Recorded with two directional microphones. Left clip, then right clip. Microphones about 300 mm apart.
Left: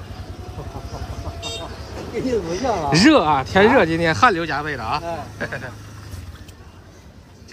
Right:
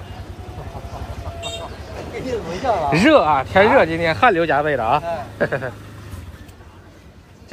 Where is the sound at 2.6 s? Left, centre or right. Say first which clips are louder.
Right 1 dB; left; by 5.7 s centre.